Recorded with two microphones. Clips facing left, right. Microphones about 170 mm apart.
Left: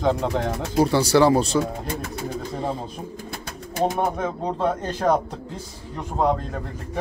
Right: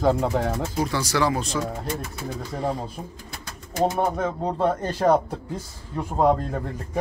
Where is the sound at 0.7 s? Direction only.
30° left (ahead or behind).